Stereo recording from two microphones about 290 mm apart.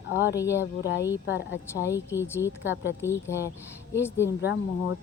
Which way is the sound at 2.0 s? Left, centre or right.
Centre.